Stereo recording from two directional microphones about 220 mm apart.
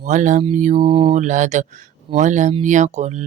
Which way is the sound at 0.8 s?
20° right (ahead or behind).